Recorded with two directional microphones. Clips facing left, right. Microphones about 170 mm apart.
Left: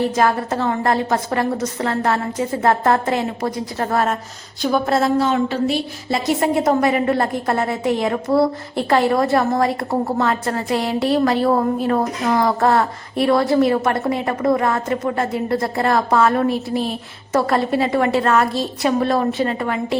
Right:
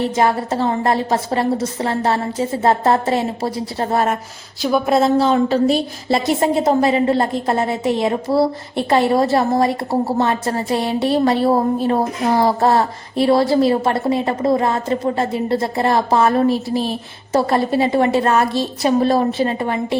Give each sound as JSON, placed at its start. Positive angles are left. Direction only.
{"t": 0.2, "sound": "a woman's voice", "side_deg": -25}